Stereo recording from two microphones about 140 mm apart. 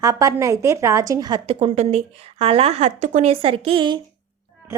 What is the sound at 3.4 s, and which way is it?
Speech, 40° right (ahead or behind).